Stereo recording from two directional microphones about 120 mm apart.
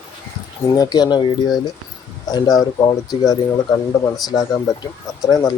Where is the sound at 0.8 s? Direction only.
35° left (ahead or behind).